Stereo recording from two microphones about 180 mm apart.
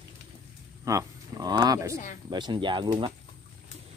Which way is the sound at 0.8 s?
20° right (ahead or behind).